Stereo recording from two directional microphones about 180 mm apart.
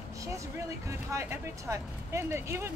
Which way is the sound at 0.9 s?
15° right (ahead or behind).